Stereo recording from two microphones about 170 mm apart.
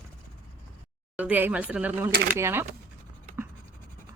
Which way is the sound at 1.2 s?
10° right (ahead or behind).